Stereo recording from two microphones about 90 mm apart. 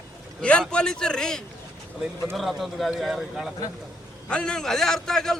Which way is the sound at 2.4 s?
Centre (ahead or behind).